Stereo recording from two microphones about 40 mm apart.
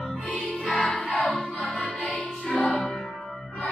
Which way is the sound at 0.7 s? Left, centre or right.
Left.